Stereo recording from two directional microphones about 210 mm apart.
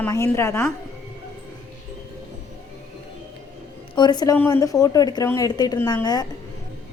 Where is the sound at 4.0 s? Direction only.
20° left (ahead or behind).